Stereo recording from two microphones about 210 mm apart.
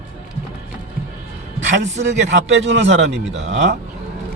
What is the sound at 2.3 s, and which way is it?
Speech, 55° right (ahead or behind).